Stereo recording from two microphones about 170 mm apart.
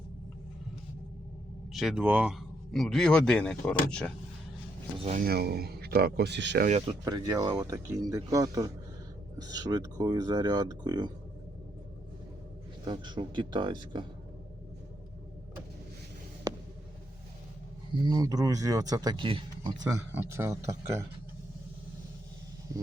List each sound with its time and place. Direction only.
1.7 s a man's voice: centre (ahead or behind)
5.2 s speech: 70° right (ahead or behind); by 6.7 s 90° right
7.0 s speech: 20° right (ahead or behind)
12.8 s speech: 25° right (ahead or behind)
18.0 s speech: 20° right (ahead or behind)